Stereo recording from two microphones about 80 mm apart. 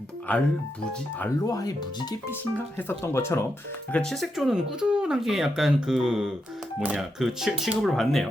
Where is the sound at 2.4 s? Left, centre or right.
Left.